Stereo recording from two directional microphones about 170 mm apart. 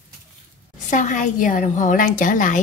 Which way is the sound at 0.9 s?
50° left (ahead or behind).